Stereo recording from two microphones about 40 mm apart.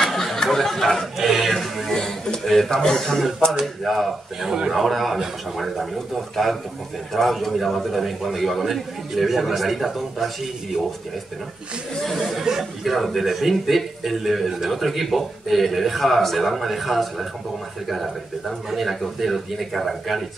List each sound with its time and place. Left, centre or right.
0.0 s a sound: centre
1.1 s a sound: centre
1.5 s music: centre
2.0 s music: centre
2.4 s a man's voice: centre
2.8 s a man's voice: centre
3.6 s a man's voice: centre
7.2 s a man's voice: centre
12.2 s a man's voice: centre